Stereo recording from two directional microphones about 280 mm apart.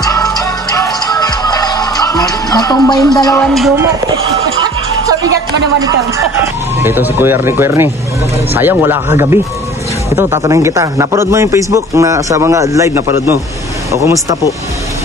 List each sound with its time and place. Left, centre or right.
0.0 s music: centre
5.9 s speech: centre